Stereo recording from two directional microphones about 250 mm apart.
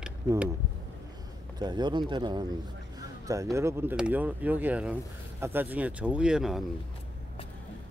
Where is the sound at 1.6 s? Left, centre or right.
Centre.